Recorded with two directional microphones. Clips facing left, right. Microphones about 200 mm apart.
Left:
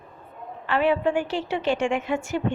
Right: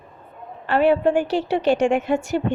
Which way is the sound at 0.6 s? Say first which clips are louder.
Right 5 dB; 45° right (ahead or behind).